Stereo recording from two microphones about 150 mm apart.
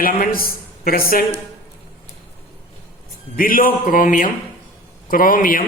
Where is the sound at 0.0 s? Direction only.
75° left (ahead or behind).